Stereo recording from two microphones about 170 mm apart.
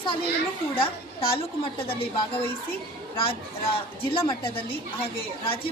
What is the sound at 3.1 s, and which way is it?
A woman's voice, 30° left (ahead or behind).